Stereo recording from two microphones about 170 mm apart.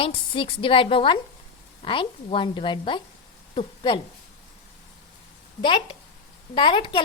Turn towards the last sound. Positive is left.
turn(degrees=30)  # may be behind; listen again after turning